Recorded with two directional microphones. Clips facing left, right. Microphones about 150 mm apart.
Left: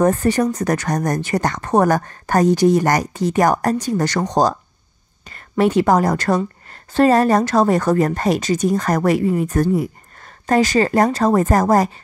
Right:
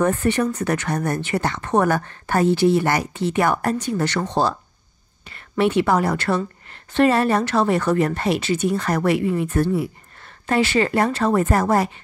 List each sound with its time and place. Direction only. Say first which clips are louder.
0.0 s speech: left 3 dB; 35° left (ahead or behind)